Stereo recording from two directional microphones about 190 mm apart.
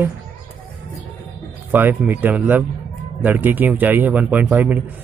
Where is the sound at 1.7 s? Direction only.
10° right (ahead or behind).